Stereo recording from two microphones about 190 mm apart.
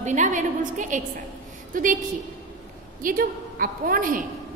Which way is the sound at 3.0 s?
50° right (ahead or behind).